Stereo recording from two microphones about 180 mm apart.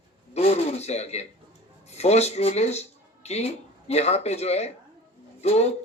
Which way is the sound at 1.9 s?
35° left (ahead or behind).